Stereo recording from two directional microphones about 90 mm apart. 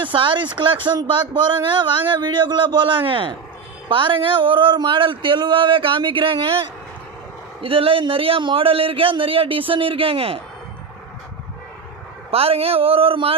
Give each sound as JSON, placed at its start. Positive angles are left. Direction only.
{"t": 0.0, "sound": "a man's voice", "side_deg": -70}
{"t": 12.3, "sound": "a man's voice", "side_deg": -90}